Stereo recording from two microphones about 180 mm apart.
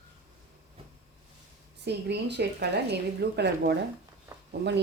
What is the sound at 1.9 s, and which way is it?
Speech, 70° right (ahead or behind).